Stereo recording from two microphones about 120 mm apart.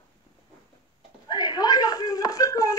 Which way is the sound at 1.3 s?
35° left (ahead or behind).